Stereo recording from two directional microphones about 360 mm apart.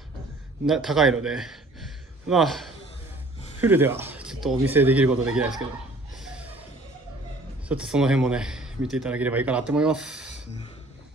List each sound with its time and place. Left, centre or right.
0.7 s speech: centre
6.1 s chuckle: centre
7.6 s speech: centre